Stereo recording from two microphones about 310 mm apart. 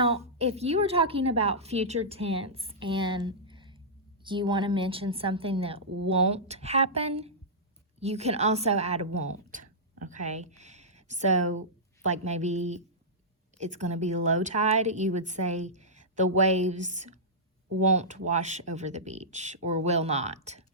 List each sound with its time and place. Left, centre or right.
0.0 s a woman's voice: centre